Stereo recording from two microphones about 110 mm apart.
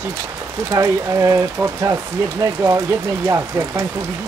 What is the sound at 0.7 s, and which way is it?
Speech, 30° right (ahead or behind).